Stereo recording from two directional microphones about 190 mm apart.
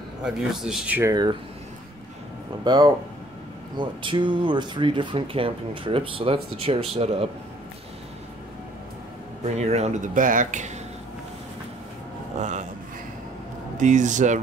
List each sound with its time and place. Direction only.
0.2 s speech: centre (ahead or behind)
2.6 s speech: 25° right (ahead or behind)
9.6 s speech: 35° right (ahead or behind)
12.4 s speech: 40° right (ahead or behind)
13.7 s speech: 40° right (ahead or behind)